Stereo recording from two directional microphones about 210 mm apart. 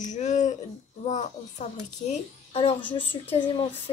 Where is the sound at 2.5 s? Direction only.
25° left (ahead or behind).